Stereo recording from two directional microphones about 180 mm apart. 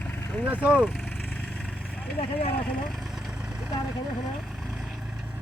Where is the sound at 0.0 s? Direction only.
5° left (ahead or behind).